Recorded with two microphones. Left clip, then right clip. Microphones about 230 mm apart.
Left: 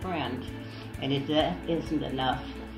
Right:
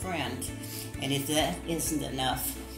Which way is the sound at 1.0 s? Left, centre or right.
Centre.